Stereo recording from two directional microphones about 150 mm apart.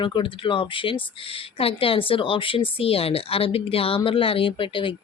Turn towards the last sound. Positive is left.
turn(degrees=35)  # may be behind; listen again after turning